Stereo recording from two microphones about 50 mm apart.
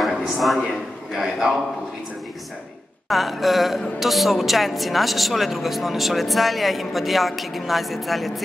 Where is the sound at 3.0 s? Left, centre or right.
Centre.